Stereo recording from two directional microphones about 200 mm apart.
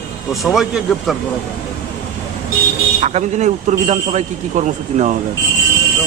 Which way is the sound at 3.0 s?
35° right (ahead or behind).